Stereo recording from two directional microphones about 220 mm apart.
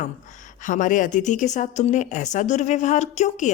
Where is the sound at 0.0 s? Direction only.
35° left (ahead or behind).